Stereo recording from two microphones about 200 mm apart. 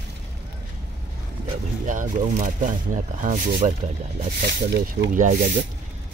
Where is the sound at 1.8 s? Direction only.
40° right (ahead or behind).